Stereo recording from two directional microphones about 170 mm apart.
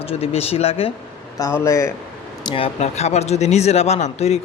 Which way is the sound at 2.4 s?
35° left (ahead or behind).